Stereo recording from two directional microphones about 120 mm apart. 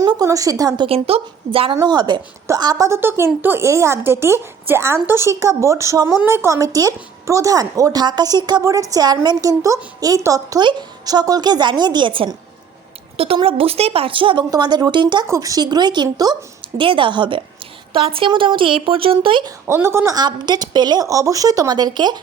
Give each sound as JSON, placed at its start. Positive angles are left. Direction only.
{"t": 0.0, "sound": "speech", "side_deg": -35}
{"t": 0.9, "sound": "a woman's voice", "side_deg": -55}
{"t": 1.7, "sound": "a woman's voice", "side_deg": -35}
{"t": 14.5, "sound": "a woman's voice", "side_deg": -35}
{"t": 19.5, "sound": "a woman's voice", "side_deg": -20}
{"t": 20.1, "sound": "speech", "side_deg": -35}